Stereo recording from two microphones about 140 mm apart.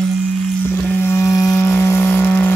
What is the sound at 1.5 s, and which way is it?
Vehicle, 15° left (ahead or behind).